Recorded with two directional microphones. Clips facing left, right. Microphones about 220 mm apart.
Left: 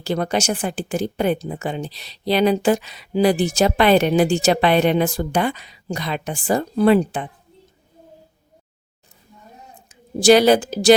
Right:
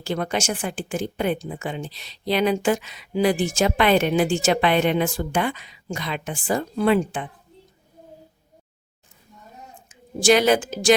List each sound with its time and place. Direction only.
0.0 s a woman's voice: 40° left (ahead or behind)
9.9 s a woman's voice: 35° left (ahead or behind)